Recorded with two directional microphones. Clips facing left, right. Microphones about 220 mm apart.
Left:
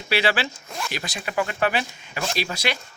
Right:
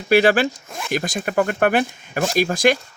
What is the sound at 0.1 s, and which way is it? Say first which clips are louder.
Speech: right 8 dB; 45° right (ahead or behind).